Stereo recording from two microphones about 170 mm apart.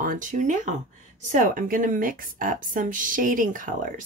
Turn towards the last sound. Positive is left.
turn(degrees=-50)  # may be behind; listen again after turning